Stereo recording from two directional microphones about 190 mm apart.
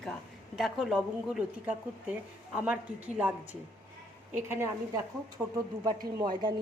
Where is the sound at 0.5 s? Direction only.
5° right (ahead or behind).